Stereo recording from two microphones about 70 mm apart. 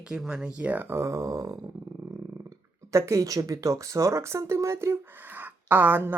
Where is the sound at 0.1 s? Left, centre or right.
Centre.